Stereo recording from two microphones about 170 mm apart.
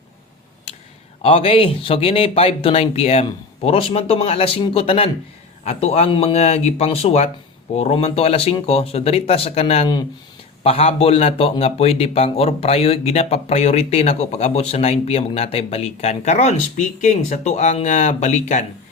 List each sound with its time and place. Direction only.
1.2 s a man's voice: 35° left (ahead or behind)